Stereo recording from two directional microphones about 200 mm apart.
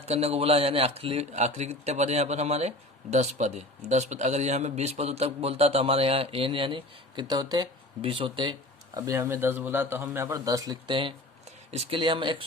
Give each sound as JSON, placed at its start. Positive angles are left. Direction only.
{"t": 0.1, "sound": "a man's voice", "side_deg": -30}